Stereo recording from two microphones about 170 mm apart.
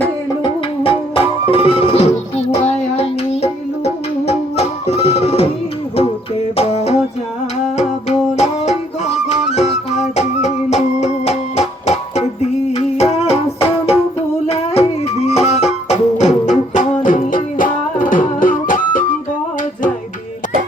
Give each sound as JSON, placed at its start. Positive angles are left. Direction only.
{"t": 0.4, "sound": "music", "side_deg": 30}
{"t": 6.6, "sound": "music", "side_deg": 40}